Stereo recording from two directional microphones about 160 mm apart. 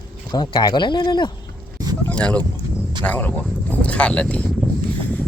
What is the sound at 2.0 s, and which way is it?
Speech, 5° left (ahead or behind).